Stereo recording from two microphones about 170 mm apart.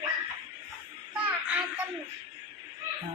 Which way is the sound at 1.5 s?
5° right (ahead or behind).